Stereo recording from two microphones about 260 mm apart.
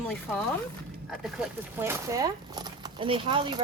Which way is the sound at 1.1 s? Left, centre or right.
Centre.